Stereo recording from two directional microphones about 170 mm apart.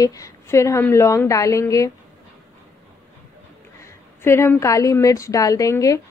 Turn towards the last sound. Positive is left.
turn(degrees=20)  # may be behind; listen again after turning